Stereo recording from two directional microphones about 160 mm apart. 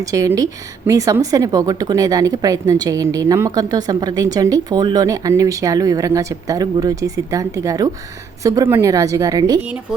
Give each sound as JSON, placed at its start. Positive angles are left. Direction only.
{"t": 0.0, "sound": "speech", "side_deg": -20}